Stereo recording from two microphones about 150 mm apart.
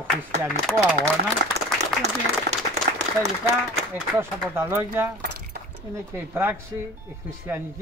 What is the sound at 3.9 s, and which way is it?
A man's voice, 15° right (ahead or behind).